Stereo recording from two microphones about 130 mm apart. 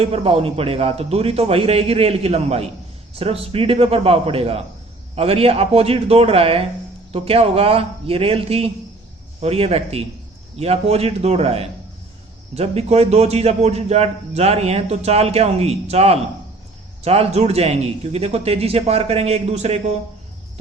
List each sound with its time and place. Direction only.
0.0 s a man's voice: 50° right (ahead or behind)